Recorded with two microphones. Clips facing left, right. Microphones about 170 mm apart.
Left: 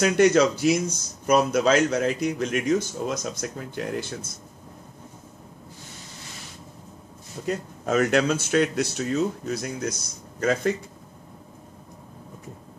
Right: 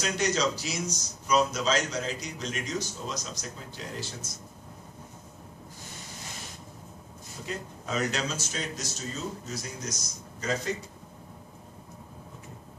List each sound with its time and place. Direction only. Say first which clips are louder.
0.0 s speech: left 10 dB; 55° left (ahead or behind)
7.4 s speech: left 9 dB; 50° left (ahead or behind)